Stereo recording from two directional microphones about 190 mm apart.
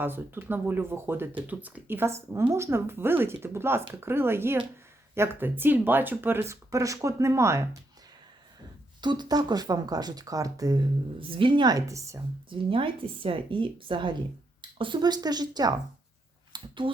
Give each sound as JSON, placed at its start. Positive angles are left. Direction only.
{"t": 0.0, "sound": "speech", "side_deg": -10}
{"t": 9.0, "sound": "speech", "side_deg": -25}
{"t": 12.5, "sound": "speech", "side_deg": -25}
{"t": 16.5, "sound": "a sound", "side_deg": -25}